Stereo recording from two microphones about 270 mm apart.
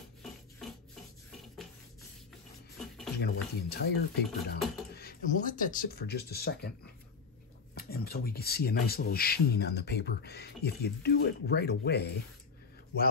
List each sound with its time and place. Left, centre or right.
3.2 s speech: left
7.7 s speech: left